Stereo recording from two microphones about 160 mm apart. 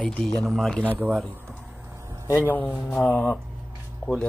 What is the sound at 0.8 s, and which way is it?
A man's voice, 10° right (ahead or behind).